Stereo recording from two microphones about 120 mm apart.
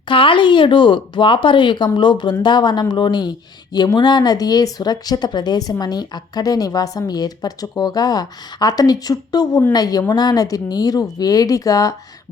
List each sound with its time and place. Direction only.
0.1 s speech: 45° left (ahead or behind); by 11.9 s 30° left (ahead or behind)